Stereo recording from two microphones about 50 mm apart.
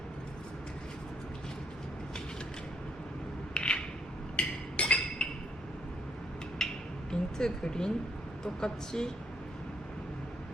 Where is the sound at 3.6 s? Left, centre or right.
Left.